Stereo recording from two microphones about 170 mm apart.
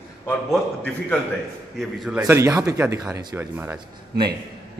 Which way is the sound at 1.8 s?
5° right (ahead or behind).